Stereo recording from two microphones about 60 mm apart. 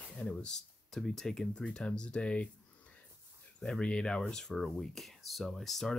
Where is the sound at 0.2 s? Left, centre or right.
Centre.